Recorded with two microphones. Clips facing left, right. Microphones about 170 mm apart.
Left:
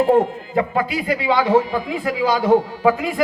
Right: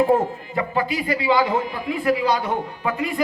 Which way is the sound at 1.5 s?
90° left.